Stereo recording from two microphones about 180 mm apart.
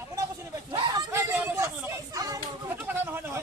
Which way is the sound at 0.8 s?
20° right (ahead or behind).